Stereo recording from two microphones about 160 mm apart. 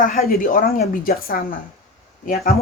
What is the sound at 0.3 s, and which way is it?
Speech, 60° left (ahead or behind).